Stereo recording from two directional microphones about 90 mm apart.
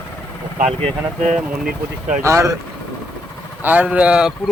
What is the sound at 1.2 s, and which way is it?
Speech, 5° right (ahead or behind).